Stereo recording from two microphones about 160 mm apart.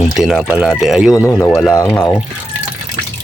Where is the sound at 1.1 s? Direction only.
15° left (ahead or behind).